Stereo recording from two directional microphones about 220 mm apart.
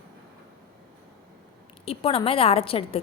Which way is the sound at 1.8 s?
25° left (ahead or behind).